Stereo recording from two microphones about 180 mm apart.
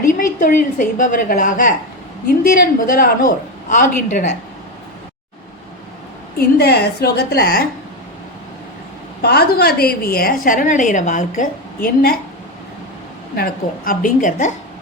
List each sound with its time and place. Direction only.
0.1 s a woman's voice: 45° left (ahead or behind)
6.3 s a woman's voice: 60° left (ahead or behind)
9.2 s a woman's voice: 60° left (ahead or behind)
13.3 s a woman's voice: 55° left (ahead or behind)